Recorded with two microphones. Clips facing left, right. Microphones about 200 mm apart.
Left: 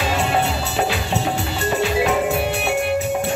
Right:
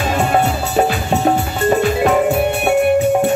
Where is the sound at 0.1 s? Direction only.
50° right (ahead or behind).